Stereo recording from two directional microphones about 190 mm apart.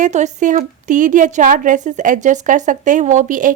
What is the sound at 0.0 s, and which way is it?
A woman's voice, 40° right (ahead or behind).